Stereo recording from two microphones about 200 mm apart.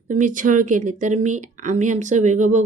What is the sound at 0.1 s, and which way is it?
Speech, 40° right (ahead or behind).